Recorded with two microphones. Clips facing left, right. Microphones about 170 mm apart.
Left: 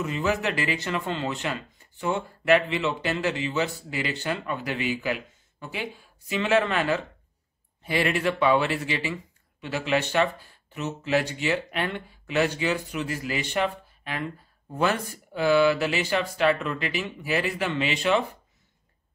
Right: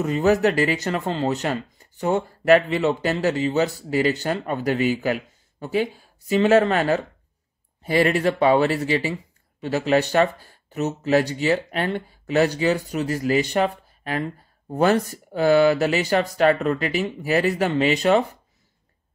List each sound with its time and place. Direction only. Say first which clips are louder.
0.0 s speech: right 8 dB; 40° right (ahead or behind)